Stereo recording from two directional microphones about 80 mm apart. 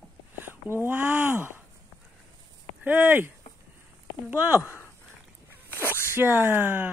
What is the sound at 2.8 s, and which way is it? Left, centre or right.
Speech, right.